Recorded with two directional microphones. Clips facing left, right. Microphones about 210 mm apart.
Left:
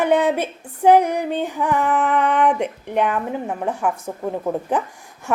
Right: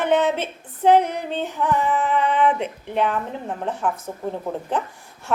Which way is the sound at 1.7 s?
55° left (ahead or behind).